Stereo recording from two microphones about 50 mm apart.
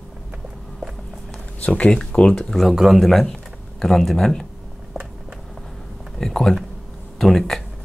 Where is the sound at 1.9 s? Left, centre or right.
Centre.